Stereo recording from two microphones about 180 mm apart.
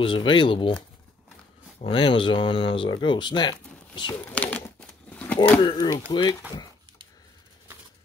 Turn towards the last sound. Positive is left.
turn(degrees=25)  # may be behind; listen again after turning